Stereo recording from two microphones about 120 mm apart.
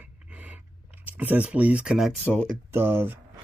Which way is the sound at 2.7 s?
20° right (ahead or behind).